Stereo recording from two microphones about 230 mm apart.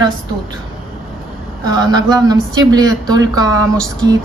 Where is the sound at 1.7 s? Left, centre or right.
Centre.